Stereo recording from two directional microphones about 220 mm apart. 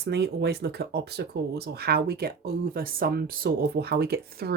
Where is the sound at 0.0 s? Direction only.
50° right (ahead or behind).